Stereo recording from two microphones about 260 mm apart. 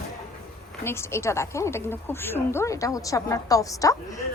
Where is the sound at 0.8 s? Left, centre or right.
Centre.